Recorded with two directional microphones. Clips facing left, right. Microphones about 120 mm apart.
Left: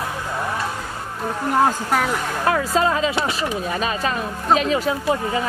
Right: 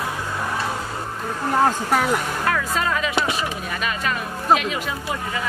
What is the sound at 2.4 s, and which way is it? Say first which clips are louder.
Speech: left 4 dB; 30° left (ahead or behind).